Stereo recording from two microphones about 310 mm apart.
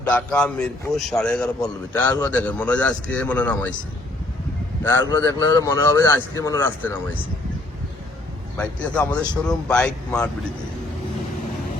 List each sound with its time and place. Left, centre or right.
0.0 s a man's voice: centre
4.8 s speech: centre
8.5 s a man's voice: centre